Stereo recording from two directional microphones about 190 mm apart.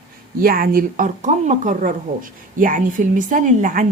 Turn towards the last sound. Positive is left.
turn(degrees=-40)  # may be behind; listen again after turning